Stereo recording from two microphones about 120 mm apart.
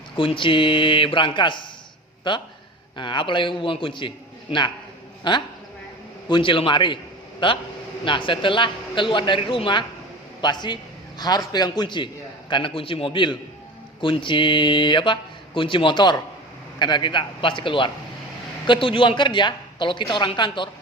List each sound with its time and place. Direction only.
0.2 s speech: 45° left (ahead or behind)
3.0 s a woman's voice: 40° left (ahead or behind)